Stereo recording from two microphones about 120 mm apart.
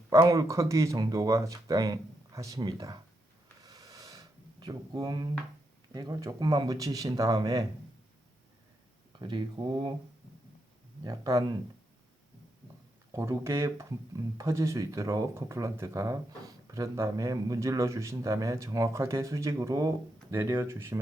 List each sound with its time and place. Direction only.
0.1 s speech: 25° right (ahead or behind)
3.6 s a sound: 35° right (ahead or behind)
4.6 s speech: 35° right (ahead or behind)
9.1 s speech: 40° right (ahead or behind)
11.0 s speech: 30° right (ahead or behind)
13.1 s speech: 25° right (ahead or behind)